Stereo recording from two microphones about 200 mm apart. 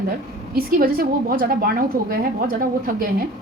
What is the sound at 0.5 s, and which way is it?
A woman's voice, 45° right (ahead or behind).